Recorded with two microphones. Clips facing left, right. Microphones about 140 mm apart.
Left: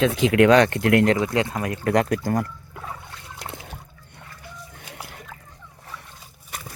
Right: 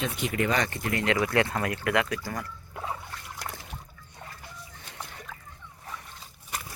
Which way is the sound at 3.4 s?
25° left (ahead or behind).